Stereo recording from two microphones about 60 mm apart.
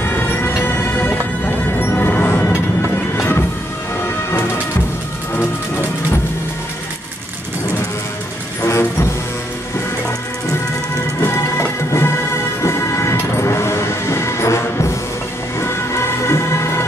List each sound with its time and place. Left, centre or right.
0.0 s music: left
4.3 s music: left
8.6 s music: left
11.1 s music: left